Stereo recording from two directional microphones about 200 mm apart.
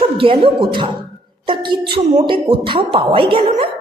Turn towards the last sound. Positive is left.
turn(degrees=-25)  # may be behind; listen again after turning